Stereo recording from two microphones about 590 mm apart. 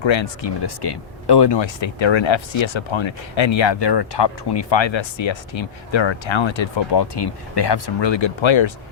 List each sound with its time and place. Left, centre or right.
0.0 s speech: left